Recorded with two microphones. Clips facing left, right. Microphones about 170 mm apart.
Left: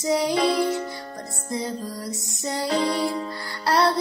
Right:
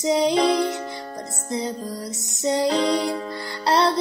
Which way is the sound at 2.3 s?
20° right (ahead or behind).